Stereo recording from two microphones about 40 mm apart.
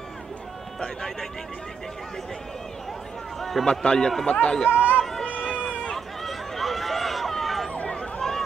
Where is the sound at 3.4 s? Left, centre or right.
Centre.